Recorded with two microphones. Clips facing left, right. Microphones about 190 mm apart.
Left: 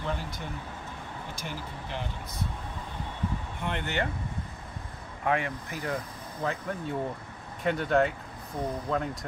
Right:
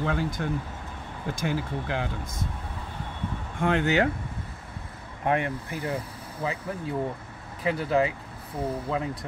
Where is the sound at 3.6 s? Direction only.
90° right.